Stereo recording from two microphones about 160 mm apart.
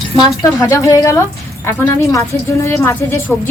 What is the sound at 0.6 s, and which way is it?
A woman's voice, 15° left (ahead or behind).